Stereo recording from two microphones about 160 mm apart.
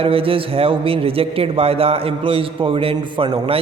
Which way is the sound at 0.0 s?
35° right (ahead or behind).